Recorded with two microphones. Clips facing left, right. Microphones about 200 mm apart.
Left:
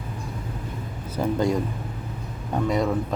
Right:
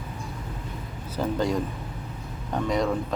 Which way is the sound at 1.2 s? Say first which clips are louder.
Left 2 dB; 10° left (ahead or behind).